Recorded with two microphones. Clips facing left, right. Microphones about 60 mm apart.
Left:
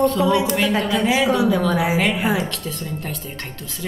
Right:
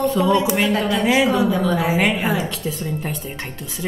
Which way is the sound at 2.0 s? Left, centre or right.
Centre.